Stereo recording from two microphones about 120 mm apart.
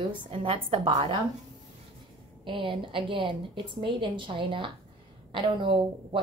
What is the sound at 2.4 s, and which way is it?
A woman's voice, 45° right (ahead or behind).